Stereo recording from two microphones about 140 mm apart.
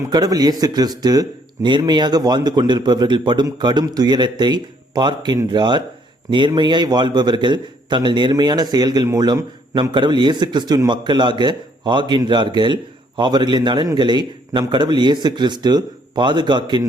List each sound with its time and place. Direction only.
0.1 s a man's voice: 30° right (ahead or behind)